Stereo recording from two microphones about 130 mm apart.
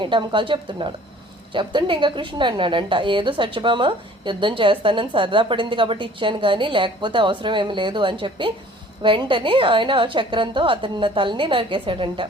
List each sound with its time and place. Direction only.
0.0 s a woman's voice: 40° right (ahead or behind)